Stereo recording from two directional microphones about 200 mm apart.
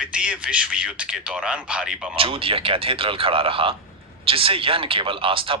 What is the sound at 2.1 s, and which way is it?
Speech, 25° right (ahead or behind).